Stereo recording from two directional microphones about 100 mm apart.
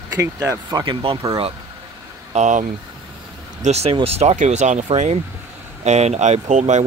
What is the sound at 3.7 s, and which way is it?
Speech, 90° right.